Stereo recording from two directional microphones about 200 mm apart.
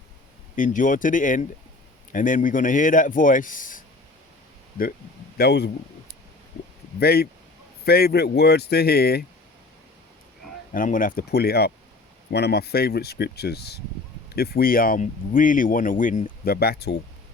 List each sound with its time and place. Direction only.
0.5 s a man's voice: 40° left (ahead or behind)
5.4 s speech: 55° left (ahead or behind)
7.0 s speech: 50° left (ahead or behind)
10.7 s speech: 40° left (ahead or behind)